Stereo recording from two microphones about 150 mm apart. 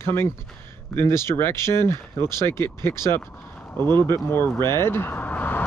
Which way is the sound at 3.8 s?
30° right (ahead or behind).